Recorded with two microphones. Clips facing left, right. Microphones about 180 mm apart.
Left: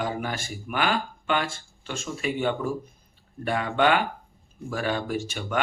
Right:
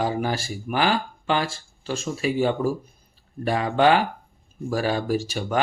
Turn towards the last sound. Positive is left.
turn(degrees=-35)  # may be behind; listen again after turning